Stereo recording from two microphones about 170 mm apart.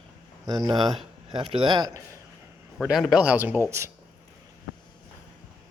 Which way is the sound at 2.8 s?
Centre (ahead or behind).